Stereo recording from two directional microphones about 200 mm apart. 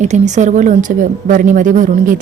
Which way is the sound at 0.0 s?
35° right (ahead or behind).